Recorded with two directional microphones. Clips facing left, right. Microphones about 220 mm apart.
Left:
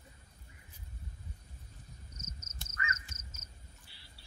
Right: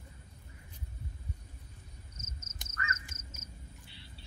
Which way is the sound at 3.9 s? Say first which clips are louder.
Right 8 dB; 20° right (ahead or behind).